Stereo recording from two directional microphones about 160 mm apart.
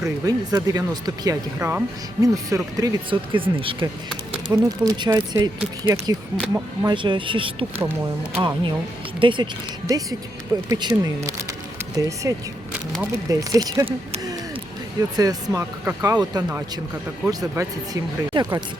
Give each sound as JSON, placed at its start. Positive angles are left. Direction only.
{"t": 0.0, "sound": "speech", "side_deg": -20}
{"t": 1.5, "sound": "speech", "side_deg": -10}
{"t": 2.2, "sound": "speech", "side_deg": -20}
{"t": 7.8, "sound": "speech", "side_deg": -15}
{"t": 8.4, "sound": "speech", "side_deg": -30}
{"t": 15.1, "sound": "speech", "side_deg": -25}